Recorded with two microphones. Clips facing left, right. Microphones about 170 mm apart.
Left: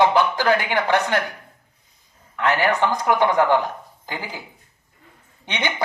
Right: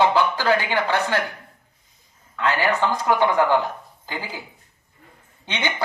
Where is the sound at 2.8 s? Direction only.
15° left (ahead or behind).